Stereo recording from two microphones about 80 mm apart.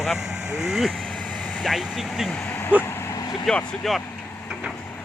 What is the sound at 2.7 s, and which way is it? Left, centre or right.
Speech, centre.